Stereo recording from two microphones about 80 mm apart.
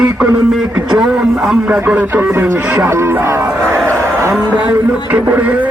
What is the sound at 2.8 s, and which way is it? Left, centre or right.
Speech, right.